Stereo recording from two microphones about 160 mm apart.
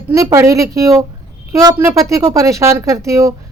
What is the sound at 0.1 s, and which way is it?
Speech, 20° right (ahead or behind).